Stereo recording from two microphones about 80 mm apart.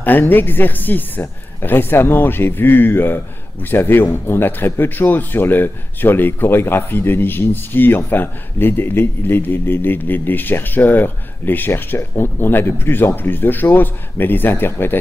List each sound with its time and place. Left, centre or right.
0.0 s speech: left